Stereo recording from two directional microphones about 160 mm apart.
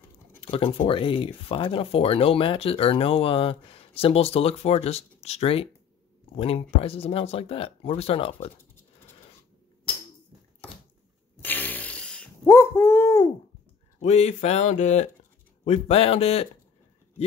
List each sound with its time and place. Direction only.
0.5 s speech: 35° left (ahead or behind)
11.4 s a sound: 10° left (ahead or behind)
13.9 s speech: 45° left (ahead or behind)